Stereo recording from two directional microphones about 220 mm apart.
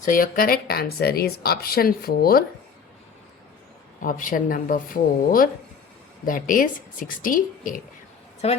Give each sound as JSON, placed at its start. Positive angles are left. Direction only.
{"t": 0.0, "sound": "speech", "side_deg": 40}
{"t": 4.0, "sound": "a woman's voice", "side_deg": 40}
{"t": 8.4, "sound": "a woman's voice", "side_deg": 30}